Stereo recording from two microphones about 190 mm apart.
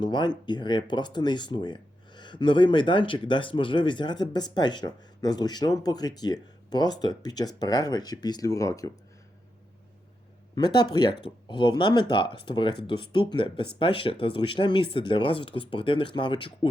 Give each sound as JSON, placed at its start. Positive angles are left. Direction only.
{"t": 0.0, "sound": "speech", "side_deg": 25}
{"t": 10.5, "sound": "speech", "side_deg": 25}